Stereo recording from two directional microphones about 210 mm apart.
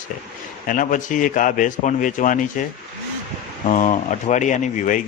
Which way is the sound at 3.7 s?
35° left (ahead or behind).